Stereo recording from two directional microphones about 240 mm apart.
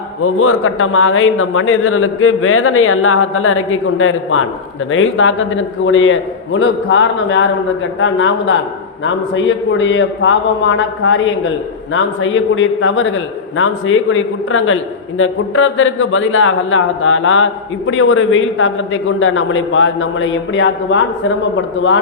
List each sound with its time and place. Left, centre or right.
0.3 s a man's voice: left